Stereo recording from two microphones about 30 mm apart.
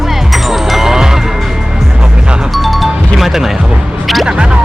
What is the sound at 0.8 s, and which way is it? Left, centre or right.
Music, centre.